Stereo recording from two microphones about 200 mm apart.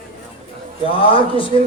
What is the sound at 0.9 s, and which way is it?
Speech, 25° left (ahead or behind).